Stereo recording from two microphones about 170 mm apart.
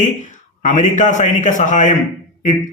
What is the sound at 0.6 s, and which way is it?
Speech, 45° left (ahead or behind).